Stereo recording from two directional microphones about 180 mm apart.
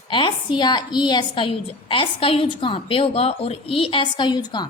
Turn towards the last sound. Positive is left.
turn(degrees=25)  # may be behind; listen again after turning